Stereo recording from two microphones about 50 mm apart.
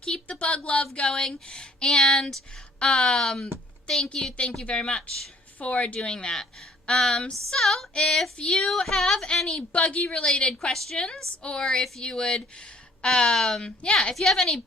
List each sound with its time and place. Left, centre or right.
0.0 s a woman's voice: left
9.6 s a woman's voice: left; by 11.0 s centre
11.0 s speech: centre